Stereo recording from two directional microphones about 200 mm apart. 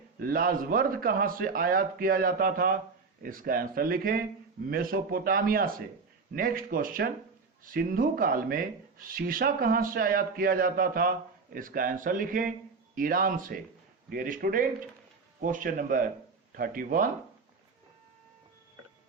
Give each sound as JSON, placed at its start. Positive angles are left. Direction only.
{"t": 0.2, "sound": "speech", "side_deg": -45}